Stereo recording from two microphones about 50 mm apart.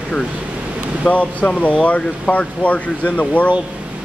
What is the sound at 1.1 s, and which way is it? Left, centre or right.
Speech, left.